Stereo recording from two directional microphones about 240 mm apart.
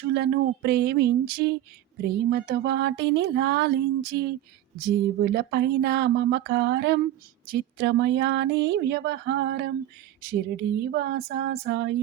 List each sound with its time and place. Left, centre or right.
0.1 s speech: right